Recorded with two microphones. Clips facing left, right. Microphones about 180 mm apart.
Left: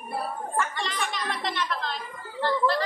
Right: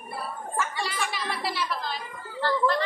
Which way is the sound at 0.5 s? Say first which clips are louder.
Even; 5° right (ahead or behind).